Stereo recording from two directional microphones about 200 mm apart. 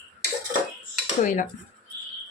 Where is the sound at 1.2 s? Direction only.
40° left (ahead or behind).